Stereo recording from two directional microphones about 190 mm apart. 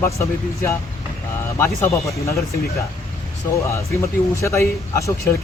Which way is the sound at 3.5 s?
15° left (ahead or behind).